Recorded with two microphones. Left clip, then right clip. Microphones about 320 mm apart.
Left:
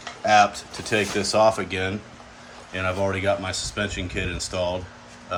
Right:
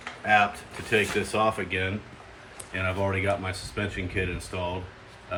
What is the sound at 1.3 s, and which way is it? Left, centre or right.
Speech, centre.